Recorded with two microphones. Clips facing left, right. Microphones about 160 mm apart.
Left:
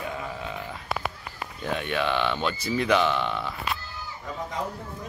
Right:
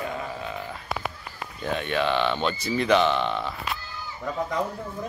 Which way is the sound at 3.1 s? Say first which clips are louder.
Right 2 dB; 20° right (ahead or behind).